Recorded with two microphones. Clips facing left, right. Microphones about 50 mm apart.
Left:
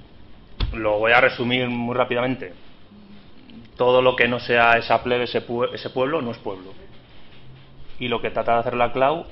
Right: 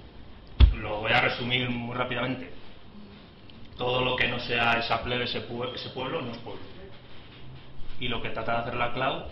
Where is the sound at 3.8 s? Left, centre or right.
Left.